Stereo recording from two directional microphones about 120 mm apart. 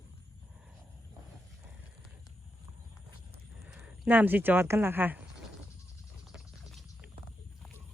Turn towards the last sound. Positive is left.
turn(degrees=-5)  # may be behind; listen again after turning